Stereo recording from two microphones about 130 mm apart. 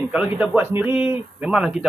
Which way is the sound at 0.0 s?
5° right (ahead or behind).